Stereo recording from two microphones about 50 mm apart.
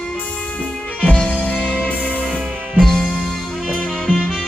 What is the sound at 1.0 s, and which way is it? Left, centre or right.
Music, left.